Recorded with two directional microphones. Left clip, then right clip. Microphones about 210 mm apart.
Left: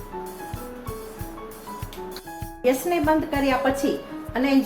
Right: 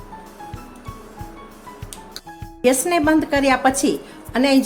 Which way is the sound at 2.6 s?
50° right (ahead or behind).